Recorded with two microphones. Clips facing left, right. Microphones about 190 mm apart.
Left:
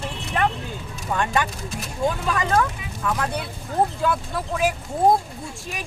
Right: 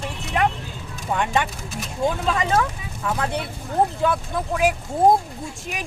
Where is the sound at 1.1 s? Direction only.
20° right (ahead or behind).